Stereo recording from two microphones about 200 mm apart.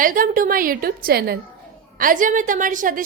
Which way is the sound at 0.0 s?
45° right (ahead or behind).